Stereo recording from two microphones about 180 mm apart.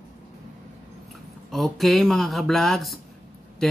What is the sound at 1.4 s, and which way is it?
Speech, centre (ahead or behind).